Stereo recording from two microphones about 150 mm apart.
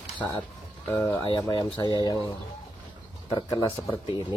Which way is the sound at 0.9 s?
15° left (ahead or behind).